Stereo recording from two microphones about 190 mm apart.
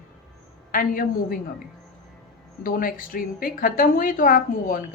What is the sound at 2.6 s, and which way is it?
A woman's voice, 50° left (ahead or behind).